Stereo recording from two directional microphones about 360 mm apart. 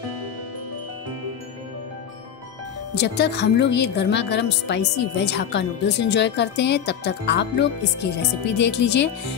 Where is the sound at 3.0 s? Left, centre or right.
Left.